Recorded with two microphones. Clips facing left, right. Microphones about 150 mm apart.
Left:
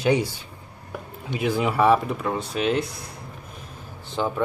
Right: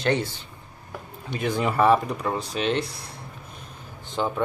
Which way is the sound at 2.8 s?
55° left (ahead or behind).